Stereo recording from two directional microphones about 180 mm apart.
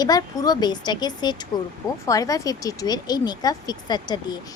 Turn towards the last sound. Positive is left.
turn(degrees=25)  # may be behind; listen again after turning